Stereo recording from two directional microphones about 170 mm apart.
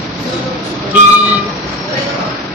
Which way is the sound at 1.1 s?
10° right (ahead or behind).